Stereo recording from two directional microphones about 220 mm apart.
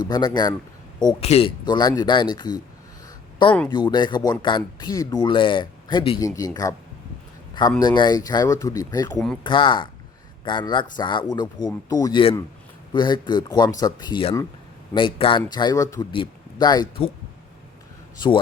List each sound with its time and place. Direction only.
0.0 s speech: 20° left (ahead or behind)
3.7 s speech: 20° left (ahead or behind)
7.8 s speech: 20° left (ahead or behind)